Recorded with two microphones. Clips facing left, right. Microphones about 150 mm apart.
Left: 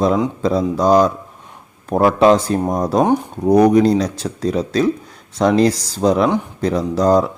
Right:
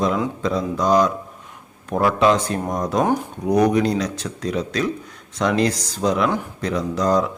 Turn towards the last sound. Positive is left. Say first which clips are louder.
# left 5 dB
turn(degrees=35)  # may be behind; listen again after turning